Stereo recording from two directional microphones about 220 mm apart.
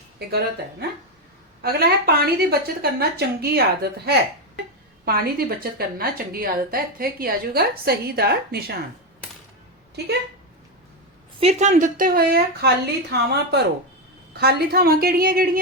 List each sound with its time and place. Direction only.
0.3 s a woman's voice: 45° right (ahead or behind)
11.3 s a woman's voice: 30° right (ahead or behind)